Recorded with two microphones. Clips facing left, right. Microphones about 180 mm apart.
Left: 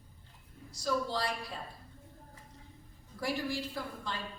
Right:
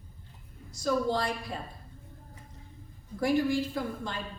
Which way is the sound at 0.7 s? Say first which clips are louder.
Right 5 dB; 50° right (ahead or behind).